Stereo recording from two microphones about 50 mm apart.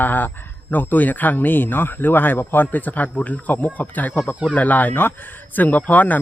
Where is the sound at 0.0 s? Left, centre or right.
Left.